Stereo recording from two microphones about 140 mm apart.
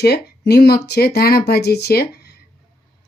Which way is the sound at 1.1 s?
90° left.